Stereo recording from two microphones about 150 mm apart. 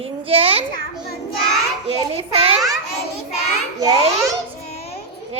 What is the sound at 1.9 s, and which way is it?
Speech, 40° right (ahead or behind).